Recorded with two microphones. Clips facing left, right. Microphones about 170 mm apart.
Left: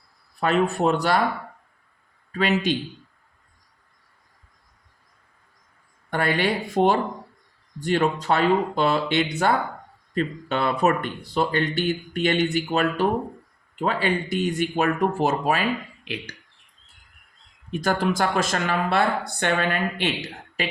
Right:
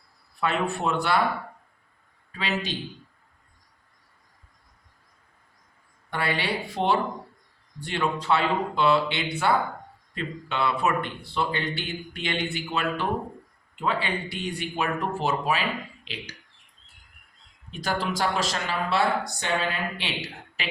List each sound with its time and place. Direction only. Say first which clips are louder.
0.3 s speech: left 5 dB; 40° left (ahead or behind)
2.3 s speech: left 8 dB; 50° left (ahead or behind)
6.1 s speech: left 5 dB; 50° left (ahead or behind)
17.7 s speech: left 6 dB; 50° left (ahead or behind)